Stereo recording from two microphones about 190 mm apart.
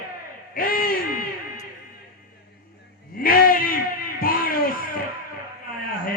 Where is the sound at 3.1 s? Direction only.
50° left (ahead or behind).